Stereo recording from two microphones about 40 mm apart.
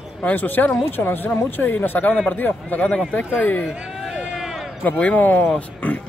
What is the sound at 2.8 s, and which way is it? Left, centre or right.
Speech, left.